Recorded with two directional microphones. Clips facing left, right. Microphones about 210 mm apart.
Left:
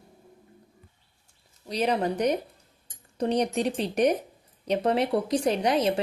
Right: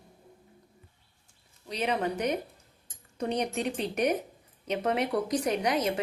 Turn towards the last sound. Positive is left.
turn(degrees=30)  # may be behind; listen again after turning